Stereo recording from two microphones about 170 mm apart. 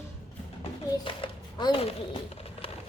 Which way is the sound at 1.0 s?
30° left (ahead or behind).